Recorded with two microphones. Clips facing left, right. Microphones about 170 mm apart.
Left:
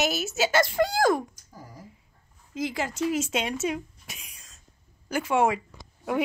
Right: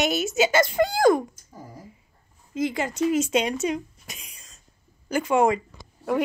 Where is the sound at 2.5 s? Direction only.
Centre (ahead or behind).